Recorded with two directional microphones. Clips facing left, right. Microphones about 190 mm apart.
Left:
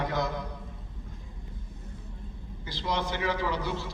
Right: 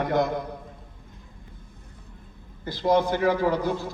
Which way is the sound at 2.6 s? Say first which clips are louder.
Right 10 dB; 50° right (ahead or behind).